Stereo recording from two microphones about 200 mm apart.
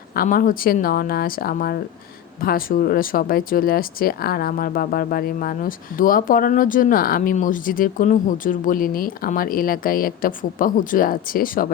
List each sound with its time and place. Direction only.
0.1 s speech: 45° left (ahead or behind)